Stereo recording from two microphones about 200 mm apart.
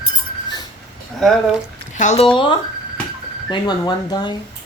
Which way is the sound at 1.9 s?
35° left (ahead or behind).